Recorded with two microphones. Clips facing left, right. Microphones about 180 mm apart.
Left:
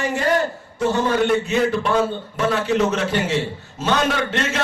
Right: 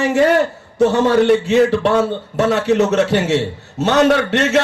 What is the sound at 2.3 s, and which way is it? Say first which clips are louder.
A man's voice: right 5 dB; 70° right (ahead or behind).